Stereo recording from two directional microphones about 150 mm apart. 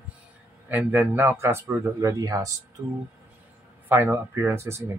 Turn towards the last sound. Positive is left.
turn(degrees=-15)  # may be behind; listen again after turning